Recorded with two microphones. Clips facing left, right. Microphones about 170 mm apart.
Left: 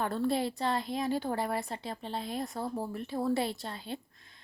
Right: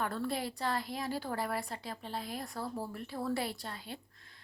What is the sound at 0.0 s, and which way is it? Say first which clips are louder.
A woman's voice: left 5 dB; 25° left (ahead or behind).